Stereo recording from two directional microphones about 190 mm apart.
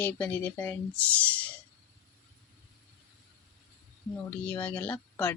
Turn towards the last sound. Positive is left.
turn(degrees=10)  # may be behind; listen again after turning